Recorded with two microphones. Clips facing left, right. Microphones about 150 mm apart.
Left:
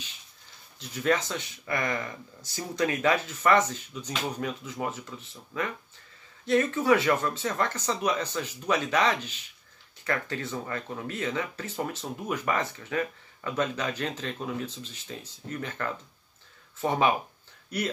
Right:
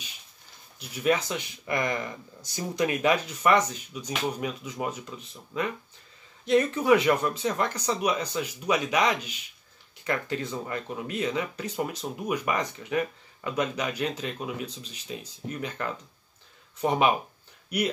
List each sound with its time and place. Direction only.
0.7 s speech: 15° right (ahead or behind)